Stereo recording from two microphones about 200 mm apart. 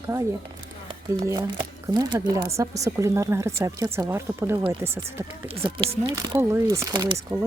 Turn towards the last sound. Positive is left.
turn(degrees=-25)  # may be behind; listen again after turning